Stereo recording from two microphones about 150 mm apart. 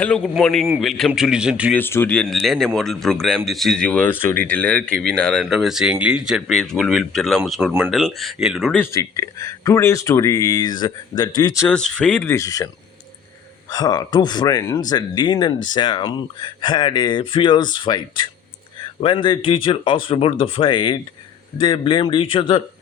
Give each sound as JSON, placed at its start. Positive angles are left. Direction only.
{"t": 0.0, "sound": "speech", "side_deg": 5}
{"t": 1.7, "sound": "speech", "side_deg": 15}
{"t": 8.7, "sound": "speech", "side_deg": 15}
{"t": 11.7, "sound": "speech", "side_deg": 5}
{"t": 12.3, "sound": "speech", "side_deg": 20}
{"t": 13.7, "sound": "speech", "side_deg": 25}